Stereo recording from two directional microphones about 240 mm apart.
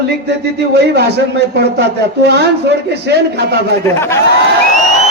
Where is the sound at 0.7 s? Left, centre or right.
Right.